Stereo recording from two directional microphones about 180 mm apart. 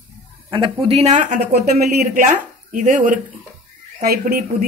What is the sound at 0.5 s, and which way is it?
Speech, 30° right (ahead or behind).